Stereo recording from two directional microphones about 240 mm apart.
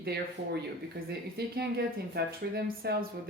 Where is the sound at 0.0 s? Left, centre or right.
Right.